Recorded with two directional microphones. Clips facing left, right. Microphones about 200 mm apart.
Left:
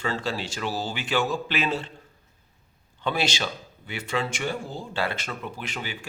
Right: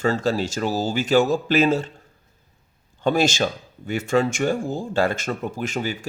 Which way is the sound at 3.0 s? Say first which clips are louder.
Right 7 dB; 45° right (ahead or behind).